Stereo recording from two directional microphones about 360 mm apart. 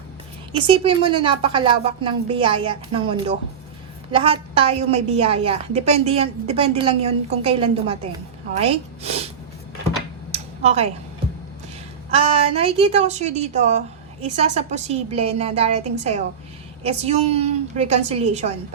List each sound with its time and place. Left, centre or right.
0.5 s a woman's voice: centre
10.3 s a sound: centre
12.1 s a woman's voice: centre